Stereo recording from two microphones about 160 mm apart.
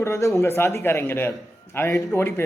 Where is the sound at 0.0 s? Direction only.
20° left (ahead or behind).